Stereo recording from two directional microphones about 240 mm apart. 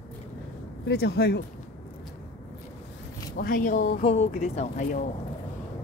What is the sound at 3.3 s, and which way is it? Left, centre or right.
Speech, left.